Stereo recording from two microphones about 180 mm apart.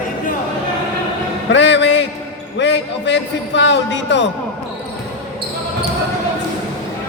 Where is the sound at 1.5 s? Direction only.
85° left.